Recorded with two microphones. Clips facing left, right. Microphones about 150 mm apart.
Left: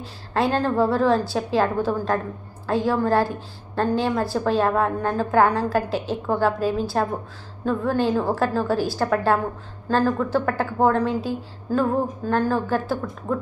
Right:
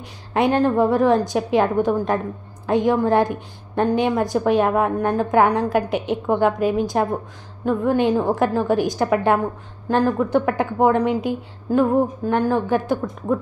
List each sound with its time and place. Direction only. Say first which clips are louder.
0.0 s a woman's voice: right 3 dB; 15° right (ahead or behind)